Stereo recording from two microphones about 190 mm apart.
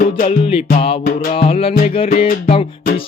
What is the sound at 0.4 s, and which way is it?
Music, 30° left (ahead or behind).